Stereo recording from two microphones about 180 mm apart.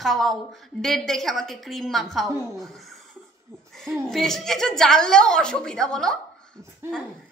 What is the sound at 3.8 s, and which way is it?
A woman's voice, centre (ahead or behind).